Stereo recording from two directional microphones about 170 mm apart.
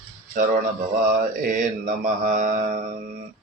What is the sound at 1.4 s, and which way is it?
Speech, 50° right (ahead or behind).